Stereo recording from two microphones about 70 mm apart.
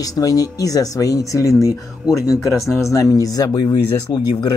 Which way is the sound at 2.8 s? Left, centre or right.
Left.